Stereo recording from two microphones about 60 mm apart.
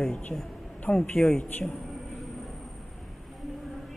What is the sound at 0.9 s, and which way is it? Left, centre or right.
Speech, left.